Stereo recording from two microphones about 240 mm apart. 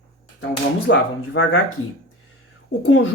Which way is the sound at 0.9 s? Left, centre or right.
Left.